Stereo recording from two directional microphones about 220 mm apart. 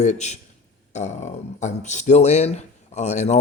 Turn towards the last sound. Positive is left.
turn(degrees=30)  # may be behind; listen again after turning